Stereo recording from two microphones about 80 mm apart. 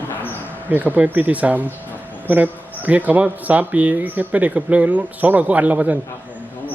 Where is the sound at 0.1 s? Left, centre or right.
Left.